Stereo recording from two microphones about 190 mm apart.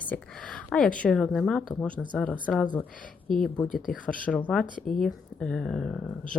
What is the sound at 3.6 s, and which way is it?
Speech, 45° left (ahead or behind).